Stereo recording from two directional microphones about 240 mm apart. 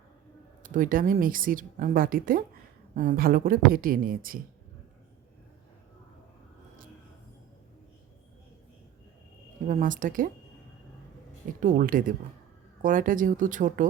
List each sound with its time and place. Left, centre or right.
0.6 s speech: right
9.6 s speech: right
11.6 s speech: right